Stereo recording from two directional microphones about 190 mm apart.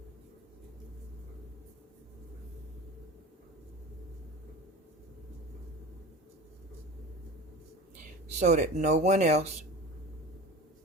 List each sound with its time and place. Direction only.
8.4 s speech: 35° right (ahead or behind)